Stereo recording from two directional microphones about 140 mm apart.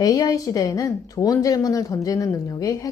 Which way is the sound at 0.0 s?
25° left (ahead or behind).